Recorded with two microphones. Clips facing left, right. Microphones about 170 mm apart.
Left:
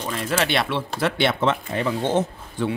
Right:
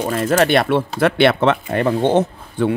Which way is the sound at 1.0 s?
65° right (ahead or behind).